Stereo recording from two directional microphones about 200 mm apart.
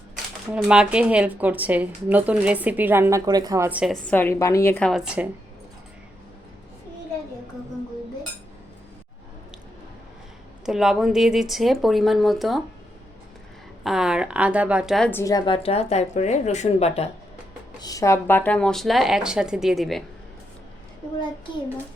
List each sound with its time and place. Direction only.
0.5 s speech: 5° right (ahead or behind)
4.0 s a woman's voice: 10° left (ahead or behind); by 5.3 s 5° right (ahead or behind)
10.7 s speech: centre (ahead or behind)
13.8 s speech: 5° right (ahead or behind)
15.2 s speech: 20° left (ahead or behind)
17.7 s speech: 20° left (ahead or behind); by 20.1 s centre (ahead or behind)